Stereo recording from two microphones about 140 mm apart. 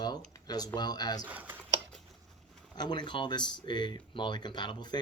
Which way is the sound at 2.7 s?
30° left (ahead or behind).